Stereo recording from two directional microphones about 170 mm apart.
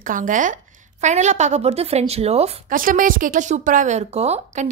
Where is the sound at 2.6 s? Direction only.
55° right (ahead or behind).